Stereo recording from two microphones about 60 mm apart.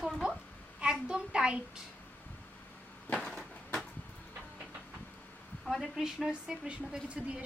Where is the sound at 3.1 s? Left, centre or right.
Centre.